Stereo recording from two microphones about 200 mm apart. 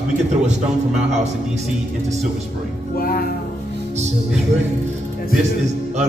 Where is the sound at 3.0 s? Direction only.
45° left (ahead or behind).